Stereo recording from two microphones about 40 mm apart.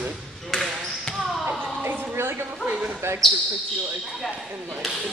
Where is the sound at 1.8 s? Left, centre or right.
Right.